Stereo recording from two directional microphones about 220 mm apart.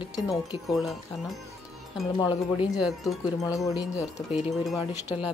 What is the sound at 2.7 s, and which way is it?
Speech, centre (ahead or behind).